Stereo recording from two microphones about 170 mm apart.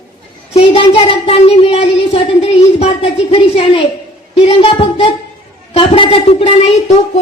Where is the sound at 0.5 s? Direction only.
35° left (ahead or behind).